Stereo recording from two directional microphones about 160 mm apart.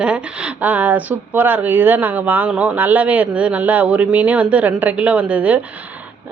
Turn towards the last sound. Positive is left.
turn(degrees=-10)  # may be behind; listen again after turning